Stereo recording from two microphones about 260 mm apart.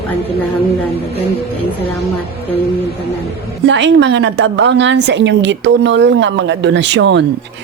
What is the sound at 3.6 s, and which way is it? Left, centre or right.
A woman's voice, right.